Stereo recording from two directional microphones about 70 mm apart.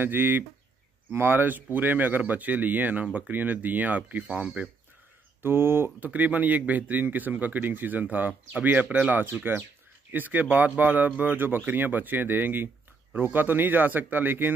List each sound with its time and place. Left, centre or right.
0.0 s speech: right
5.4 s speech: right